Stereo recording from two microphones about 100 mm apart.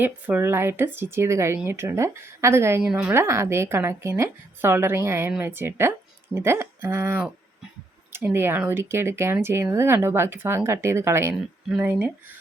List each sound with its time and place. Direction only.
0.0 s speech: 20° right (ahead or behind)
2.8 s a woman's voice: 15° right (ahead or behind)
3.2 s speech: 30° right (ahead or behind)